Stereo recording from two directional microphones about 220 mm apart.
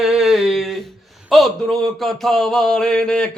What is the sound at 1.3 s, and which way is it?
Speech, centre (ahead or behind).